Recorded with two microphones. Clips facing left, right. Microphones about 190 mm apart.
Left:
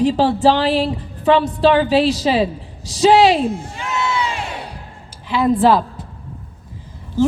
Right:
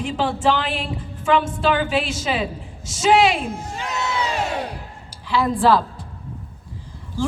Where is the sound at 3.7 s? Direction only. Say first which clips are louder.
Left 3 dB; 40° right (ahead or behind).